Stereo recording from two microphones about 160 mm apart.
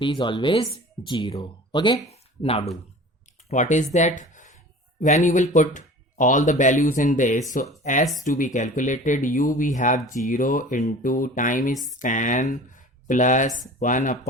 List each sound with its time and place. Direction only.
0.0 s speech: 30° left (ahead or behind)
3.5 s speech: 50° left (ahead or behind)
3.9 s a sound: 50° left (ahead or behind)
5.0 s speech: 50° left (ahead or behind)